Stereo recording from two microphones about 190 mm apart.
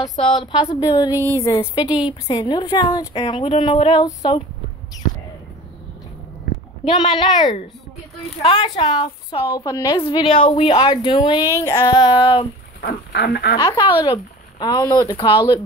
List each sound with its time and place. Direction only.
0.5 s a woman's voice: 25° left (ahead or behind)
6.9 s a woman's voice: 25° left (ahead or behind)
12.8 s speech: 60° left (ahead or behind)
13.6 s a woman's voice: 25° left (ahead or behind)